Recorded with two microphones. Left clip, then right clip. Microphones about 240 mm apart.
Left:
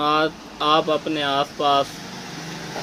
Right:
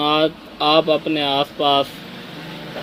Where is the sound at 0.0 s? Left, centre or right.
Centre.